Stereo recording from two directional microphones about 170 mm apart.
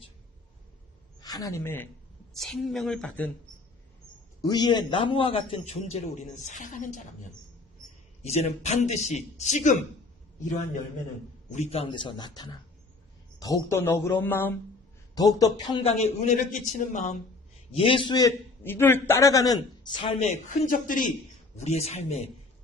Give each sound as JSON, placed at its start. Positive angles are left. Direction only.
{"t": 1.2, "sound": "speech", "side_deg": 20}
{"t": 2.3, "sound": "speech", "side_deg": 0}
{"t": 4.4, "sound": "a man's voice", "side_deg": 25}
{"t": 8.2, "sound": "a man's voice", "side_deg": 40}
{"t": 11.5, "sound": "a man's voice", "side_deg": 40}
{"t": 15.1, "sound": "a man's voice", "side_deg": 20}
{"t": 17.7, "sound": "a man's voice", "side_deg": 30}
{"t": 20.1, "sound": "speech", "side_deg": 45}
{"t": 21.5, "sound": "a man's voice", "side_deg": 40}